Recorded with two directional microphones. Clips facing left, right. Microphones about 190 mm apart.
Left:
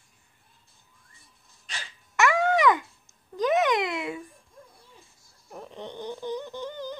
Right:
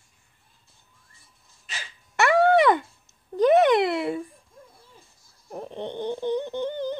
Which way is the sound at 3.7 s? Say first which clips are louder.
Right 6 dB; 35° right (ahead or behind).